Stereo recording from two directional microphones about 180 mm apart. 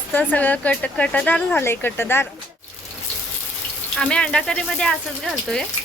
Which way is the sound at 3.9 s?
5° left (ahead or behind).